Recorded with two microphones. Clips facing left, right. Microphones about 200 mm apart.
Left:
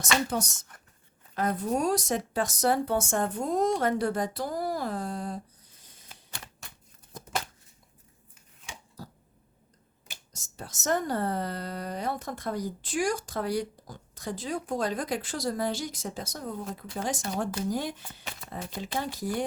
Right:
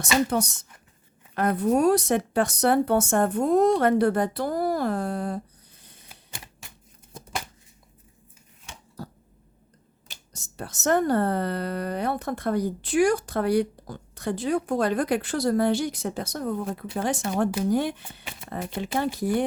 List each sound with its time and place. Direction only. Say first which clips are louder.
0.0 s speech: right 5 dB; 60° right (ahead or behind)
9.0 s a sound: right 7 dB; 60° right (ahead or behind)
10.3 s speech: right 6 dB; 60° right (ahead or behind)